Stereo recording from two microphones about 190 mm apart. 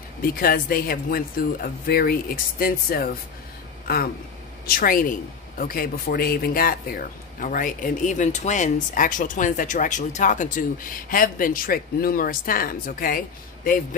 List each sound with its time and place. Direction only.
0.2 s a man's voice: 50° left (ahead or behind)